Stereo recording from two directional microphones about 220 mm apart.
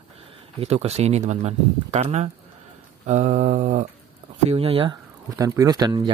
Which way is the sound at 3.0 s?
35° right (ahead or behind).